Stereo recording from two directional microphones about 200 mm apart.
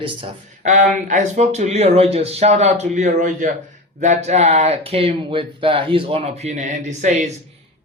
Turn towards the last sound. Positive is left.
turn(degrees=-35)  # may be behind; listen again after turning